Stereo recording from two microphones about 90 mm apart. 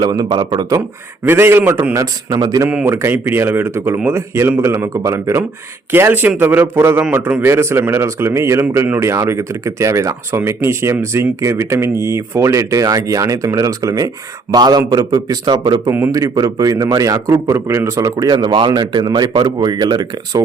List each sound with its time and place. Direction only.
0.0 s a man's voice: 50° right (ahead or behind)
1.3 s a man's voice: 25° right (ahead or behind); by 2.6 s 40° right (ahead or behind)
2.8 s a man's voice: 30° right (ahead or behind); by 15.8 s 55° right (ahead or behind)
16.1 s a man's voice: 45° right (ahead or behind)